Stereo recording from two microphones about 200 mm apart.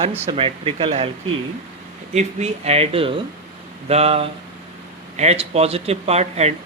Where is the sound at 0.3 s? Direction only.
25° right (ahead or behind).